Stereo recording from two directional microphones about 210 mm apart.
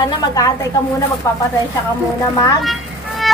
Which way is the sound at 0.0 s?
15° left (ahead or behind).